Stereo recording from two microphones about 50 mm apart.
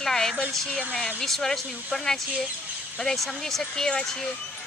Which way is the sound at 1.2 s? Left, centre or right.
Centre.